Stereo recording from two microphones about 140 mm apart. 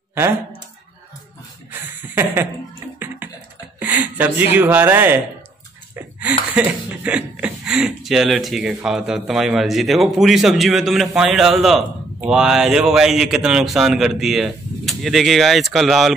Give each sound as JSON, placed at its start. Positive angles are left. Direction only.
{"t": 0.1, "sound": "speech", "side_deg": -15}
{"t": 1.7, "sound": "a sound", "side_deg": -15}
{"t": 3.8, "sound": "speech", "side_deg": -10}